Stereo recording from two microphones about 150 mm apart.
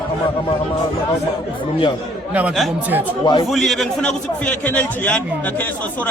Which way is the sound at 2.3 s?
5° right (ahead or behind).